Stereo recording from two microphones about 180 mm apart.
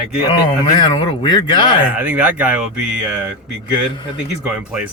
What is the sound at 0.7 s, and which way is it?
Speech, 25° left (ahead or behind).